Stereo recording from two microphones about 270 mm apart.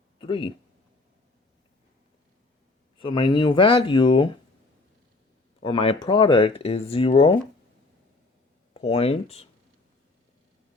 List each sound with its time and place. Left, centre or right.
0.2 s speech: centre
3.0 s speech: centre
5.6 s speech: centre
8.7 s speech: left